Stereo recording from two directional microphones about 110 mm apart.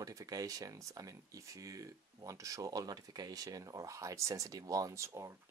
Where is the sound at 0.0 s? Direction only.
30° right (ahead or behind).